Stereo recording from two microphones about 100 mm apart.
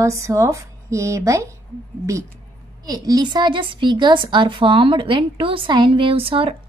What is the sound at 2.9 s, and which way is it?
A woman's voice, 40° right (ahead or behind).